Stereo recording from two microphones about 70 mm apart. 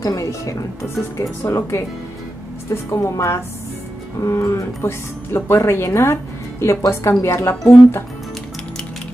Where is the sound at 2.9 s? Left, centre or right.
Left.